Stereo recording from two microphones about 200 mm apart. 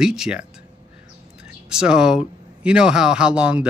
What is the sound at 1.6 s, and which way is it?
Speech, 5° right (ahead or behind).